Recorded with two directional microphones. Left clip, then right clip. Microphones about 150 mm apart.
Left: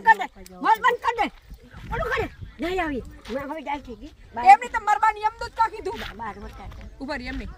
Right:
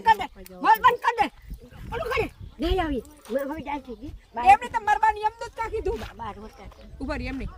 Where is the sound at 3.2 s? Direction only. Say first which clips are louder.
Right 1 dB; centre (ahead or behind).